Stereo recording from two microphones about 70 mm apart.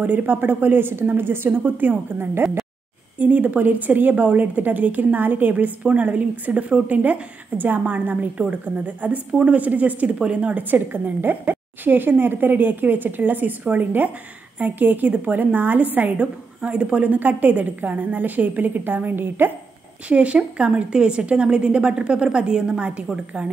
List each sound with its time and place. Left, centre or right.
0.0 s a woman's voice: right
20.1 s a woman's voice: centre